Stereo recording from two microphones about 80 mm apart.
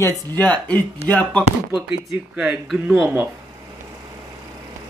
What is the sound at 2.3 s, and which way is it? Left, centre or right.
Speech, centre.